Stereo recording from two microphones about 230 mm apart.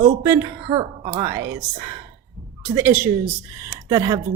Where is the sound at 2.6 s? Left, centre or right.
Centre.